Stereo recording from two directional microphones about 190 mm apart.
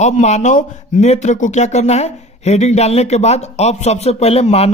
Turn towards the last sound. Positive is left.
turn(degrees=35)  # may be behind; listen again after turning